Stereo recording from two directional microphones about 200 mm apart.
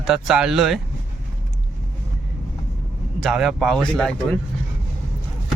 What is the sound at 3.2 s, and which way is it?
Speech, centre (ahead or behind).